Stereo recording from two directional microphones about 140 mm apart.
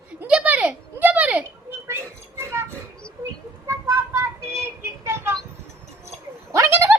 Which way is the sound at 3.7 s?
20° right (ahead or behind).